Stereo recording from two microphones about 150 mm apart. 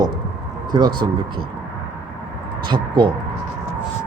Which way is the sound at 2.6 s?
30° right (ahead or behind).